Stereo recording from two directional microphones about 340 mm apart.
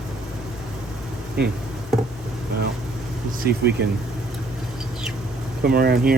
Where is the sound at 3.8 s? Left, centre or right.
Right.